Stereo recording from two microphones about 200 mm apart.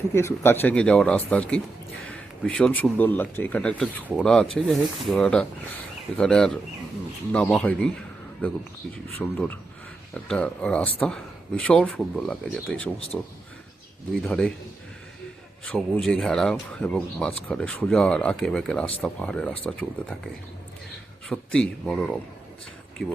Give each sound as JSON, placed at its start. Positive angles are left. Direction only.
{"t": 0.1, "sound": "speech", "side_deg": 10}
{"t": 15.6, "sound": "speech", "side_deg": 5}